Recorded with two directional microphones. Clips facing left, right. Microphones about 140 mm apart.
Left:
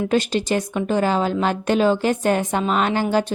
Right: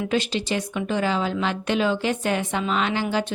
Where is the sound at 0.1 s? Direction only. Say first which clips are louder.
Left 4 dB; 45° left (ahead or behind).